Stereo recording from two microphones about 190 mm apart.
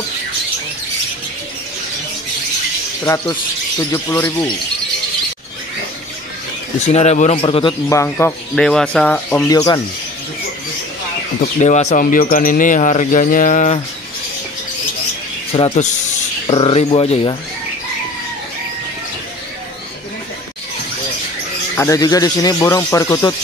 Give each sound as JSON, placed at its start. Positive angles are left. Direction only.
{"t": 6.9, "sound": "a man's voice", "side_deg": 35}
{"t": 7.9, "sound": "speech", "side_deg": 15}
{"t": 9.5, "sound": "speech", "side_deg": 20}
{"t": 11.6, "sound": "speech", "side_deg": 35}
{"t": 15.5, "sound": "a man's voice", "side_deg": 35}
{"t": 21.7, "sound": "speech", "side_deg": 15}